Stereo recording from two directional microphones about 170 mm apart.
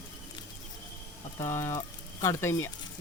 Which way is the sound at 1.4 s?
15° left (ahead or behind).